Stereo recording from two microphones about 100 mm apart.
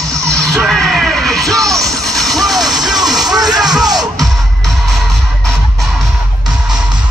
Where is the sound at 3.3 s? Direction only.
40° right (ahead or behind).